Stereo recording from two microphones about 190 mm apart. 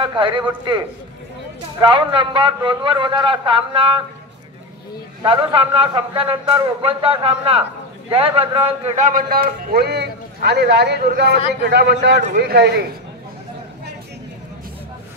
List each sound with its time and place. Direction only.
0.0 s a man's voice: 25° right (ahead or behind)
1.8 s a man's voice: 25° right (ahead or behind)
5.2 s a man's voice: 30° right (ahead or behind); by 12.8 s 60° right (ahead or behind)